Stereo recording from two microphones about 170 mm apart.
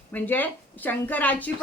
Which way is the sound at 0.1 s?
10° left (ahead or behind).